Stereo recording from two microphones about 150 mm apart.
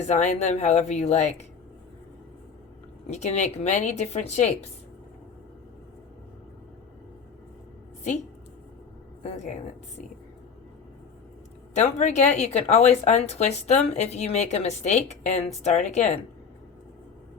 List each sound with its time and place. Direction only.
0.1 s a woman's voice: 50° left (ahead or behind)
3.1 s a woman's voice: 50° left (ahead or behind)
9.2 s a woman's voice: 50° left (ahead or behind)
11.9 s a woman's voice: 50° left (ahead or behind)